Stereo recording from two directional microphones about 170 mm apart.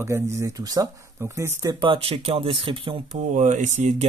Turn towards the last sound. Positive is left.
turn(degrees=-45)  # may be behind; listen again after turning